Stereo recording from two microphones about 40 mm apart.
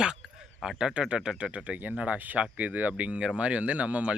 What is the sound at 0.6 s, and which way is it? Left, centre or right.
Speech, centre.